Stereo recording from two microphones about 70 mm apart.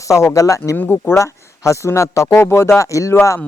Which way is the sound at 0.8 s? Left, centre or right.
Left.